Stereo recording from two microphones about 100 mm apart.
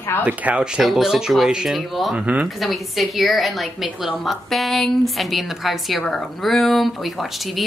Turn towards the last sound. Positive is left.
turn(degrees=0)  # may be behind; listen again after turning